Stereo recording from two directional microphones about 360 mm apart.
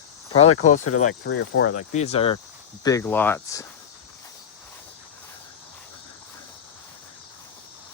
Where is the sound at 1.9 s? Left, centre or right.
Centre.